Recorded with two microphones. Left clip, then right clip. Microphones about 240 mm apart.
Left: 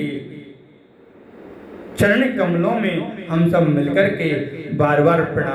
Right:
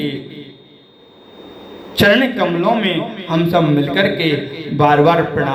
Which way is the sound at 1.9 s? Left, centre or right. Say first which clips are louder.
Right 4 dB; right.